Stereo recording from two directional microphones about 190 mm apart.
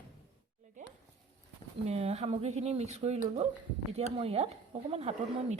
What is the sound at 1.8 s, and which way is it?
Speech, 35° right (ahead or behind).